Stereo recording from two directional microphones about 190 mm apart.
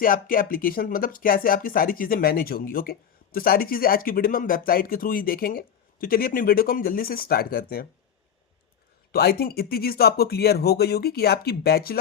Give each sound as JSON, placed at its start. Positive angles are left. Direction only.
{"t": 0.0, "sound": "speech", "side_deg": 50}
{"t": 9.1, "sound": "speech", "side_deg": 55}